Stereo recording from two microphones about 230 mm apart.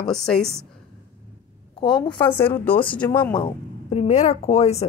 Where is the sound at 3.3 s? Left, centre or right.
Left.